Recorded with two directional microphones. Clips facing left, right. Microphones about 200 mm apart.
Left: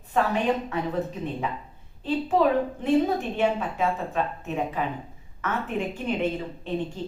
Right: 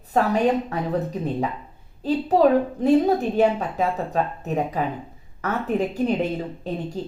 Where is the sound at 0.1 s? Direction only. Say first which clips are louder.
Right 3 dB; 35° right (ahead or behind).